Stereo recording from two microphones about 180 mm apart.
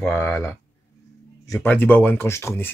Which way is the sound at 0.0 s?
10° left (ahead or behind).